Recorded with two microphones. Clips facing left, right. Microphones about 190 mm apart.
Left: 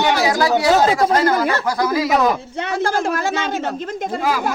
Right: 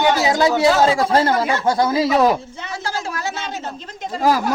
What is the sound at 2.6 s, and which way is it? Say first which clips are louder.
Speech: left 7 dB; 55° left (ahead or behind).